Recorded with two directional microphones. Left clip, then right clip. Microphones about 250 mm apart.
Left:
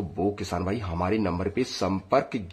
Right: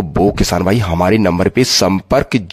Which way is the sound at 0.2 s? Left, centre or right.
Right.